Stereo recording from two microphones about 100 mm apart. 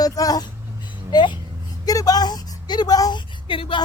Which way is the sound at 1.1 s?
50° left (ahead or behind).